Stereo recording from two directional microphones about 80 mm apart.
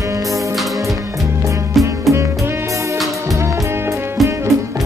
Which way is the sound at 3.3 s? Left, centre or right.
Right.